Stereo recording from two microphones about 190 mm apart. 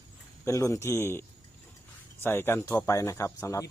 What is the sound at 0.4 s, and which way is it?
Speech, 15° left (ahead or behind).